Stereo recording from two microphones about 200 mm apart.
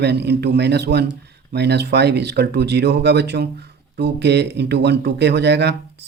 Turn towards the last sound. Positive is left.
turn(degrees=-55)  # may be behind; listen again after turning